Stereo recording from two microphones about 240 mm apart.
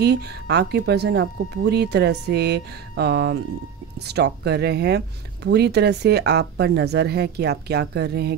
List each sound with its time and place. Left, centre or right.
0.0 s speech: right